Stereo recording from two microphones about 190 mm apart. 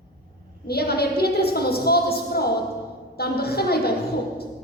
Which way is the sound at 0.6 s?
55° left (ahead or behind).